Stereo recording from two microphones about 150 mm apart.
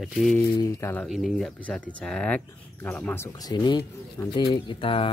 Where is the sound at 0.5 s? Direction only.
20° left (ahead or behind).